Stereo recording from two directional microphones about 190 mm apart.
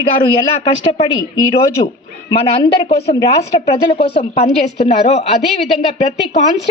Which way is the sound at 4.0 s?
35° left (ahead or behind).